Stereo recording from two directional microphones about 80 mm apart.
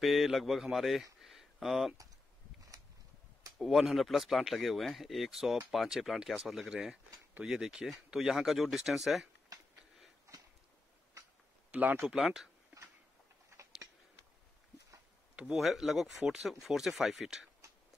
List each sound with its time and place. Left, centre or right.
0.0 s speech: centre
3.5 s speech: centre
11.7 s speech: right
15.3 s speech: centre
15.6 s speech: centre